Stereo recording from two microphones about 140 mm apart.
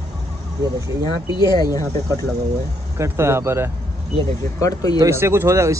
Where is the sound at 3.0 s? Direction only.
20° right (ahead or behind).